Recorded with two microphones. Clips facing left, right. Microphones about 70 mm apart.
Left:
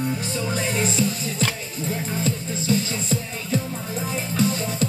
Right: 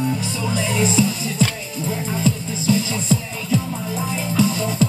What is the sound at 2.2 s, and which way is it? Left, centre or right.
Music, left.